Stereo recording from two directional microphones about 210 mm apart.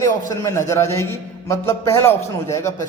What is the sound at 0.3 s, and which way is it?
A man's voice, 15° left (ahead or behind).